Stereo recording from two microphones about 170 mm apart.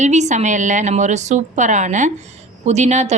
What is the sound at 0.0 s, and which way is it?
A woman's voice, 45° right (ahead or behind).